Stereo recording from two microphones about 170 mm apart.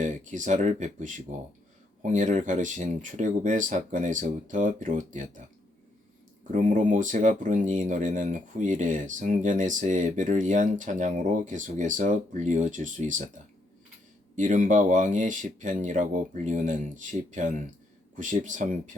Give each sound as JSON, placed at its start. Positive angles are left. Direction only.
{"t": 0.0, "sound": "speech", "side_deg": -45}
{"t": 6.5, "sound": "speech", "side_deg": -45}
{"t": 14.3, "sound": "speech", "side_deg": -45}